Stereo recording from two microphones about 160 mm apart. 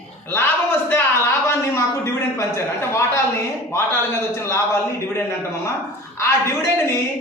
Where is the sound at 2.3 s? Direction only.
15° left (ahead or behind).